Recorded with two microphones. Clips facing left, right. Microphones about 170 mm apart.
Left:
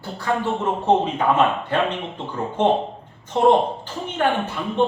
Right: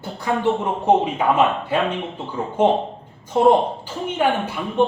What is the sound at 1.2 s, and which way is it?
Speech, 10° right (ahead or behind).